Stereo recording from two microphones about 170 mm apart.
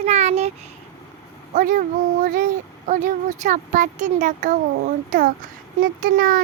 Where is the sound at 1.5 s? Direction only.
50° right (ahead or behind).